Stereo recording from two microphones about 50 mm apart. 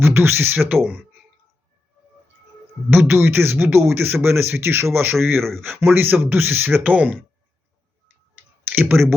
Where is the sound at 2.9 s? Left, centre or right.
Right.